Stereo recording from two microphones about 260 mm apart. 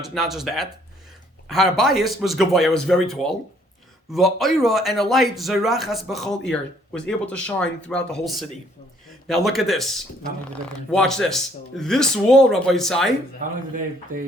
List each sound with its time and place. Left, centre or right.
0.0 s speech: centre
13.4 s speech: right